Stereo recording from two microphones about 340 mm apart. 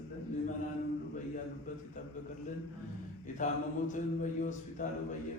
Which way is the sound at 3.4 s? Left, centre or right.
Left.